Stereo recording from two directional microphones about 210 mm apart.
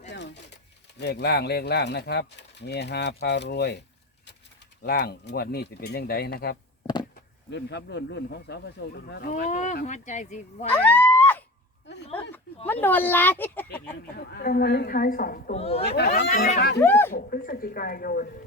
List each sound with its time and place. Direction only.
0.1 s a sound: 55° left (ahead or behind)
0.9 s speech: 50° left (ahead or behind)
9.3 s speech: 35° left (ahead or behind)
10.7 s a sound: 10° left (ahead or behind)
12.8 s speech: 10° left (ahead or behind)
13.9 s speech: 50° left (ahead or behind)
15.5 s speech: 30° left (ahead or behind)
16.0 s speech: 50° left (ahead or behind)
16.3 s speech: 40° left (ahead or behind)
16.8 s speech: 10° left (ahead or behind)
17.2 s speech: 45° left (ahead or behind)